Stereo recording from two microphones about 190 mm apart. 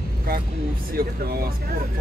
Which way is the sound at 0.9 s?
50° right (ahead or behind).